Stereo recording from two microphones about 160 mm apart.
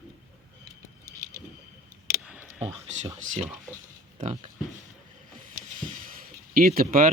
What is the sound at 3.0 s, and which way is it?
Speech, 45° right (ahead or behind).